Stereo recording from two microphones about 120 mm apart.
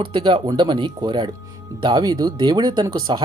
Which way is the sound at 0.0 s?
40° right (ahead or behind).